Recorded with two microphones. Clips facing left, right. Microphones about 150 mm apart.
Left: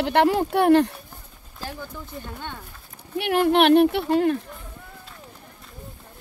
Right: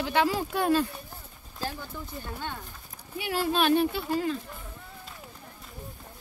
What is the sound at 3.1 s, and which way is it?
Speech, 60° left (ahead or behind).